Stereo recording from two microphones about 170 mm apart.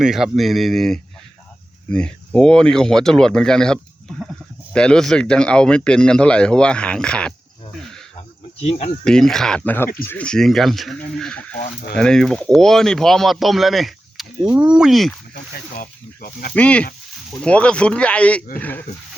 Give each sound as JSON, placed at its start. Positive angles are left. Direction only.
{"t": 0.0, "sound": "speech", "side_deg": -5}
{"t": 8.6, "sound": "speech", "side_deg": 40}
{"t": 9.0, "sound": "speech", "side_deg": 5}
{"t": 15.8, "sound": "speech", "side_deg": 60}
{"t": 16.6, "sound": "speech", "side_deg": 5}